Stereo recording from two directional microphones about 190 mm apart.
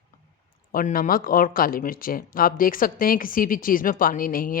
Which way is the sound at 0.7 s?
45° left (ahead or behind).